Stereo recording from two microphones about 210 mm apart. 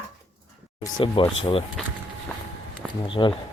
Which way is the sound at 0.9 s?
25° left (ahead or behind).